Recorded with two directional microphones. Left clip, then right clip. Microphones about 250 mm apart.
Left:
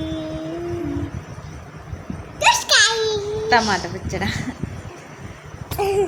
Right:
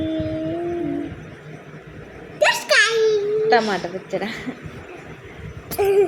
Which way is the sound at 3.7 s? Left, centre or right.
Left.